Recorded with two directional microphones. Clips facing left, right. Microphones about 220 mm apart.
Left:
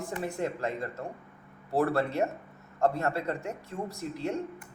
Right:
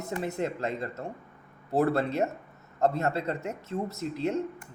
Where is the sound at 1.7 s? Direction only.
20° right (ahead or behind).